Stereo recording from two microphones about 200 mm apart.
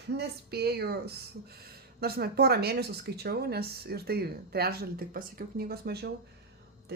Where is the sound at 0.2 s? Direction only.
55° right (ahead or behind).